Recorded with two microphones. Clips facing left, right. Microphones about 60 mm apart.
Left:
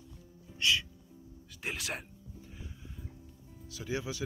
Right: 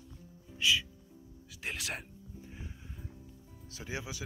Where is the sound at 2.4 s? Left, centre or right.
Right.